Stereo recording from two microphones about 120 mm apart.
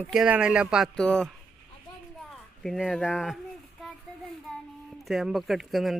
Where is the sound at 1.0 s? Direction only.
5° left (ahead or behind).